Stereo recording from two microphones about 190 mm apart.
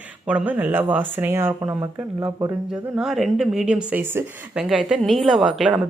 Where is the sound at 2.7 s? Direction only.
Centre (ahead or behind).